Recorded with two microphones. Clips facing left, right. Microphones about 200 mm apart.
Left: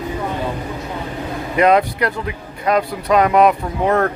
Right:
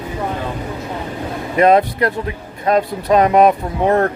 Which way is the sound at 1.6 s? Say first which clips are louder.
Right 2 dB; 25° right (ahead or behind).